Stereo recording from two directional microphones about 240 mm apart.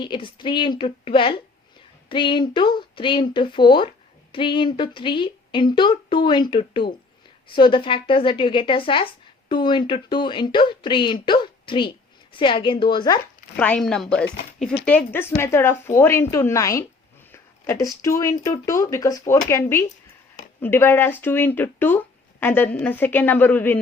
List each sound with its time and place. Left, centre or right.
0.0 s speech: centre
13.6 s speech: centre